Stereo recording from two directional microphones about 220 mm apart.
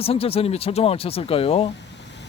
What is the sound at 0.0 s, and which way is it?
Speech, 25° left (ahead or behind).